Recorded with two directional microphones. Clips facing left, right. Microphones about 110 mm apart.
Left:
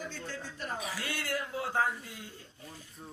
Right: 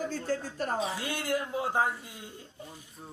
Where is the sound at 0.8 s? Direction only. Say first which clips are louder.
Right 5 dB; 25° right (ahead or behind).